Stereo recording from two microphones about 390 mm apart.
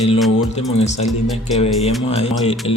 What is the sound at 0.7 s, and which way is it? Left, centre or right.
Speech, centre.